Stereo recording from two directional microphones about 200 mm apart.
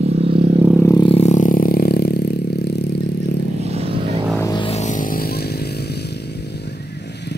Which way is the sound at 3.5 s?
30° right (ahead or behind).